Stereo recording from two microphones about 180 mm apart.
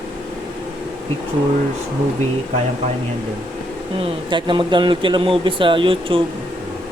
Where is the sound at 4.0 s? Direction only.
25° right (ahead or behind).